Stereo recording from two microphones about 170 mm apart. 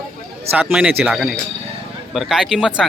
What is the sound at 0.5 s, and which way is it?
Speech, 5° right (ahead or behind).